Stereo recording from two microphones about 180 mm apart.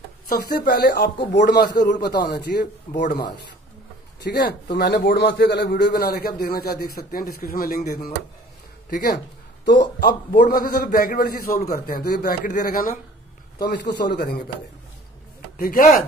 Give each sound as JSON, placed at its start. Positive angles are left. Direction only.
{"t": 0.3, "sound": "a man's voice", "side_deg": 55}
{"t": 4.2, "sound": "a man's voice", "side_deg": 65}
{"t": 10.0, "sound": "a man's voice", "side_deg": 55}
{"t": 13.6, "sound": "a man's voice", "side_deg": 70}
{"t": 15.5, "sound": "a man's voice", "side_deg": 50}